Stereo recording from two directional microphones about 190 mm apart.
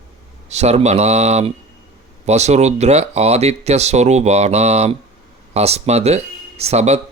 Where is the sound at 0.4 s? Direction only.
35° right (ahead or behind).